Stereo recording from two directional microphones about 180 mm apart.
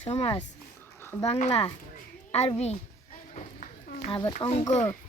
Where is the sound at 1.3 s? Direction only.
40° left (ahead or behind).